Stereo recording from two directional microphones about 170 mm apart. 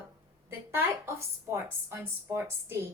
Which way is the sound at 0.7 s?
15° right (ahead or behind).